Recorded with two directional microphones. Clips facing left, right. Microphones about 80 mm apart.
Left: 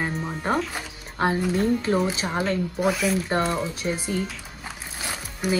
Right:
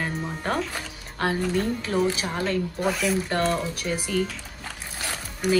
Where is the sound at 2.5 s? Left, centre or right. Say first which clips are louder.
Left 1 dB; centre.